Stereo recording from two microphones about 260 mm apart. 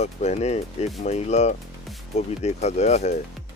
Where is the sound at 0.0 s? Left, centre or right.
Left.